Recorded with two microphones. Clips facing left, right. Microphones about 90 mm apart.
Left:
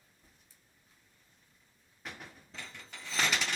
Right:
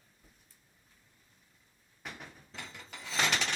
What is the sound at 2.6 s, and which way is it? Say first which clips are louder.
Rub: right 2 dB; 10° right (ahead or behind).